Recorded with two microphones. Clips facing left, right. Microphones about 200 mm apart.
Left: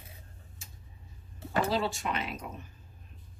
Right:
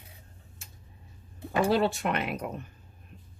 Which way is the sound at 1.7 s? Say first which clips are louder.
Right 5 dB; 60° right (ahead or behind).